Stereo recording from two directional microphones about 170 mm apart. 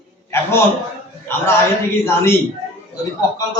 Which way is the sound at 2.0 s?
15° left (ahead or behind).